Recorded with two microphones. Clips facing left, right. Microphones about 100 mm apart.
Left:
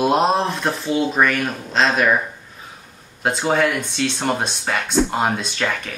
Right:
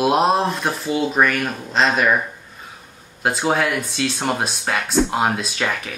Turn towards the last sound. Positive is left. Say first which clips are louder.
# even
turn(degrees=-5)  # may be behind; listen again after turning